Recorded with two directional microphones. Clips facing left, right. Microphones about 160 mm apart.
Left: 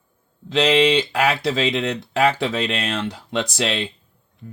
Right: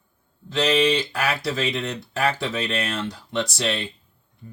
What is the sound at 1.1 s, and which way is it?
Speech, 75° left (ahead or behind).